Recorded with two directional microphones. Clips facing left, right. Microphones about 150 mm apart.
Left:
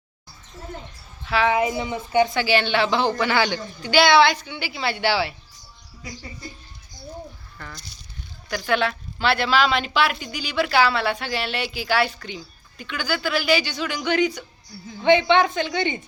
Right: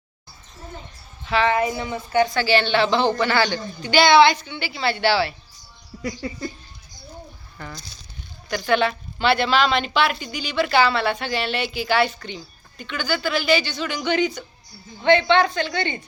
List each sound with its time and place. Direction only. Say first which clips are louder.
1.2 s a woman's voice: even; 5° left (ahead or behind)
5.9 s music: right 12 dB; 65° right (ahead or behind)
8.4 s a woman's voice: right 2 dB; centre (ahead or behind)